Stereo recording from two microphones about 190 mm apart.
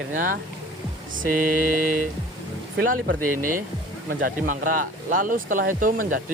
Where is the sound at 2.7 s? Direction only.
50° right (ahead or behind).